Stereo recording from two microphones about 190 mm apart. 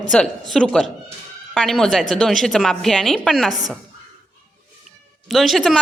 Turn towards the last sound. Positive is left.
turn(degrees=0)  # may be behind; listen again after turning